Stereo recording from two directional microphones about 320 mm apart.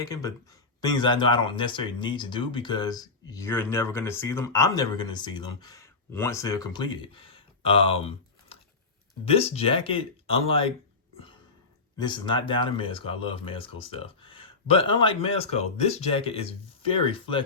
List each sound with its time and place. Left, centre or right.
0.0 s speech: centre
11.9 s speech: centre